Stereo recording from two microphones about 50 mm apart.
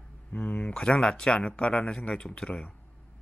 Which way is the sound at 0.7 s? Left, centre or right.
Centre.